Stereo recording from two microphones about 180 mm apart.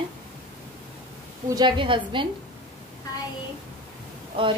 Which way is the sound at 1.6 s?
25° right (ahead or behind).